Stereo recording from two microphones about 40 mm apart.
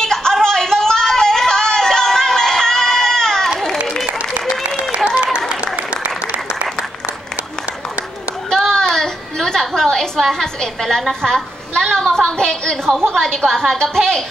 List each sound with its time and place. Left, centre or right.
0.0 s yodeling: centre
4.9 s applause: right
8.5 s a sound: centre
10.3 s a woman's voice: centre